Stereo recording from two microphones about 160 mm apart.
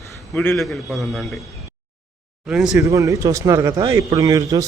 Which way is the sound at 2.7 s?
20° right (ahead or behind).